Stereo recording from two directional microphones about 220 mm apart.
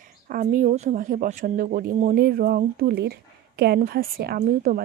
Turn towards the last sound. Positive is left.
turn(degrees=-40)  # may be behind; listen again after turning